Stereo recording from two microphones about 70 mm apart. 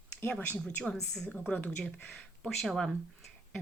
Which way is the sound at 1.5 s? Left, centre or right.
Left.